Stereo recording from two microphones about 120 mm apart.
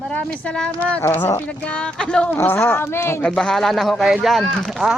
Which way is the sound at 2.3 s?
20° left (ahead or behind).